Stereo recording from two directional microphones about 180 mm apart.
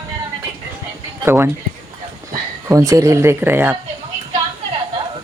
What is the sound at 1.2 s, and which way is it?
Speech, 15° right (ahead or behind).